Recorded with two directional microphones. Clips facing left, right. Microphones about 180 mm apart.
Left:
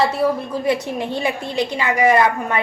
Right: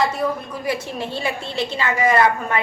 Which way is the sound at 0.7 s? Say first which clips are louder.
Left 4 dB; 20° left (ahead or behind).